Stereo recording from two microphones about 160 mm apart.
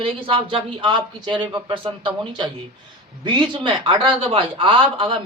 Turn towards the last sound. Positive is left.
turn(degrees=-35)  # may be behind; listen again after turning